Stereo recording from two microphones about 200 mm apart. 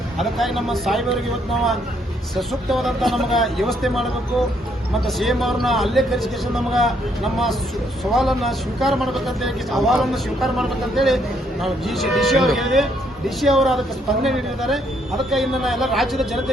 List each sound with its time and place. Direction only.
0.2 s speech: centre (ahead or behind)
2.3 s speech: centre (ahead or behind)
5.0 s speech: centre (ahead or behind)
8.1 s speech: centre (ahead or behind)